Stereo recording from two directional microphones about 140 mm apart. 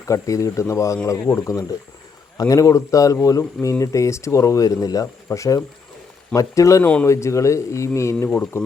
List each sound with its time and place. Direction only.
0.0 s speech: 25° left (ahead or behind)